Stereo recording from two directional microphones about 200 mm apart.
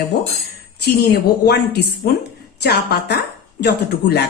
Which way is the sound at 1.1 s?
55° left (ahead or behind).